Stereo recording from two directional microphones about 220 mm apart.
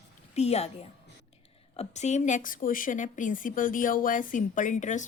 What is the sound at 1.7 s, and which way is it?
A woman's voice, 30° left (ahead or behind).